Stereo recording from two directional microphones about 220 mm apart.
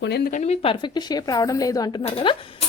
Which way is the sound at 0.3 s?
30° left (ahead or behind).